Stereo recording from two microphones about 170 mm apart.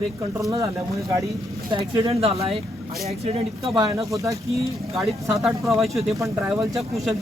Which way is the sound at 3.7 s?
20° right (ahead or behind).